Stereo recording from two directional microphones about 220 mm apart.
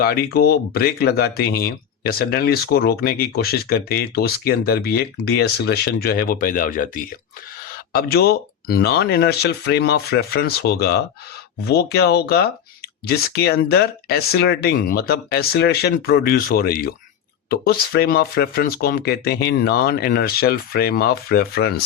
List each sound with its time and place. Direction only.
0.0 s speech: 45° left (ahead or behind)